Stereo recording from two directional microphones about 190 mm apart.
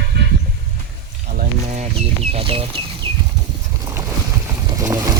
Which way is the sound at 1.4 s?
35° right (ahead or behind).